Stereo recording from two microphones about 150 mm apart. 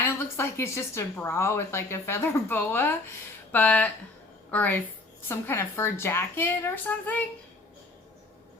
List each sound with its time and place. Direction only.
0.0 s a woman's voice: 15° left (ahead or behind)